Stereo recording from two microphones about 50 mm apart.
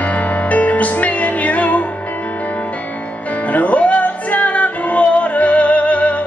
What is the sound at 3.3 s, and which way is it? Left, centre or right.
Music, left.